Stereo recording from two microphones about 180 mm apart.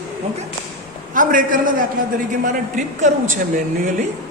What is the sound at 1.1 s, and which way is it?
Speech, 50° right (ahead or behind).